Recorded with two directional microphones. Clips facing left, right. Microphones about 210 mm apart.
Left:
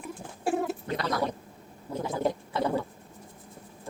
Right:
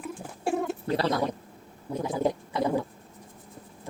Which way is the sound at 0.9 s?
30° right (ahead or behind).